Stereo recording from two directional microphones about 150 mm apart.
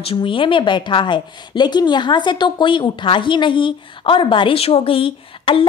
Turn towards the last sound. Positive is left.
turn(degrees=35)  # may be behind; listen again after turning